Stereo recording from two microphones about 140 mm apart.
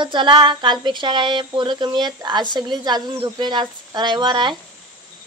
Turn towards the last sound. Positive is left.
turn(degrees=-35)  # may be behind; listen again after turning